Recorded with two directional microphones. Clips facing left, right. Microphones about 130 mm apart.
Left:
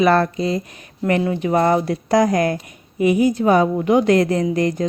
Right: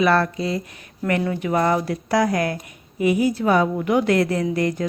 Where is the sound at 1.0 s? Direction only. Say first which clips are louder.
Left 3 dB; 25° left (ahead or behind).